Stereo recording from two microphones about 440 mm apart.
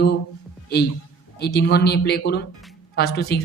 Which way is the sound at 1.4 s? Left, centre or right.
Left.